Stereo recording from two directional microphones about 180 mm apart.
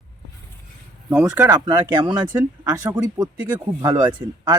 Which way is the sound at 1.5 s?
25° right (ahead or behind).